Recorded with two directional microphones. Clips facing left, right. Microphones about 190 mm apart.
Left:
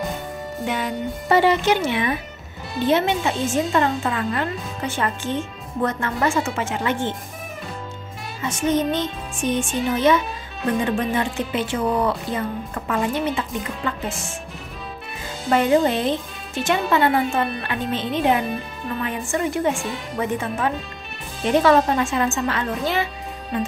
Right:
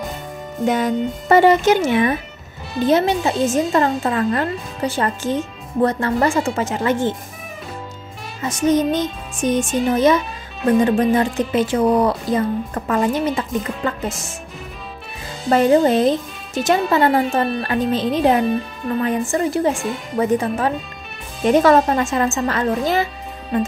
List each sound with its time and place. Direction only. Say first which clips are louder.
0.7 s a woman's voice: right 7 dB; 45° right (ahead or behind)
8.5 s speech: right 4 dB; 40° right (ahead or behind)
15.5 s a woman's voice: right 4 dB; 35° right (ahead or behind)